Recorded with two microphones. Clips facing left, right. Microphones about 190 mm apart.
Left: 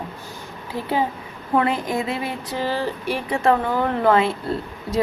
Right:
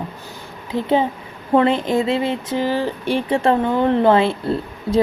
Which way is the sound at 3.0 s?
30° right (ahead or behind).